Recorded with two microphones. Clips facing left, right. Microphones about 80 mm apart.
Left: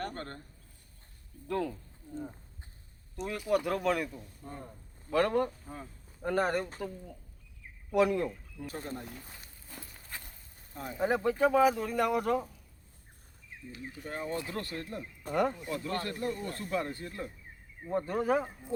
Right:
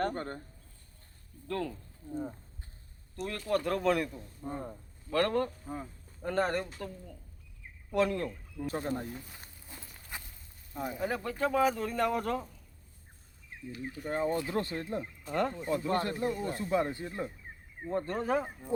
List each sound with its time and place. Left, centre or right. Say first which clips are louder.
0.1 s speech: right 4 dB; centre
1.5 s speech: left 2 dB; centre
3.2 s speech: left 1 dB; centre
4.4 s speech: right 7 dB; right
5.1 s speech: left 1 dB; centre
5.6 s speech: right 4 dB; centre
6.2 s speech: left 1 dB; centre
8.6 s speech: right 5 dB; right
10.1 s a sound: right 1 dB; centre
11.0 s speech: left 6 dB; left
14.1 s speech: right 5 dB; right
15.3 s speech: left 2 dB; centre
15.5 s speech: right 5 dB; right
17.8 s speech: left 2 dB; centre